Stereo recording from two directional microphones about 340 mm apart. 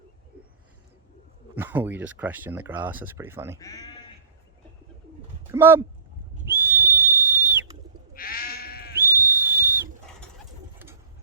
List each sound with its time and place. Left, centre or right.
1.5 s speech: centre
3.6 s speech: centre
5.5 s speech: centre
6.5 s whistle: centre
8.1 s sheep: left
9.0 s whistle: centre